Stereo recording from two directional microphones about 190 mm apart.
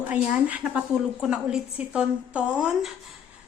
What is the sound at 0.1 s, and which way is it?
A woman's voice, 10° right (ahead or behind).